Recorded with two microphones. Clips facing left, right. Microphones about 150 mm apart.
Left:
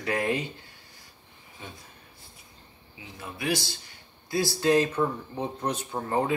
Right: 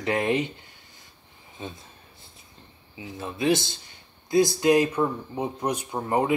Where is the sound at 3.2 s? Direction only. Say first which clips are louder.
Right 6 dB; 25° right (ahead or behind).